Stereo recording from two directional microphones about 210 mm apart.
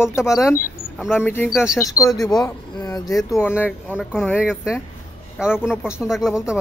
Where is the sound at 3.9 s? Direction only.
5° right (ahead or behind).